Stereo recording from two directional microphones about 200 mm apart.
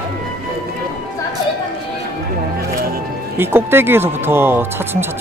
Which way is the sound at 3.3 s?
10° right (ahead or behind).